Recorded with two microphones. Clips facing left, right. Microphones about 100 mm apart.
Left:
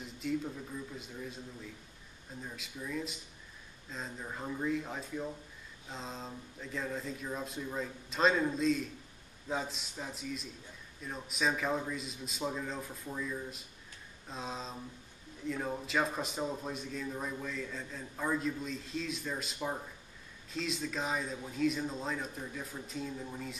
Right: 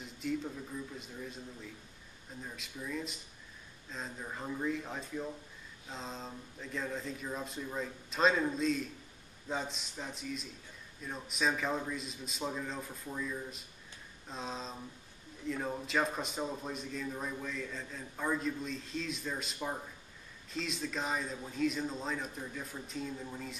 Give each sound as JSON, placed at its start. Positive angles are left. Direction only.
{"t": 0.0, "sound": "a man's voice", "side_deg": 0}
{"t": 2.4, "sound": "a man's voice", "side_deg": 0}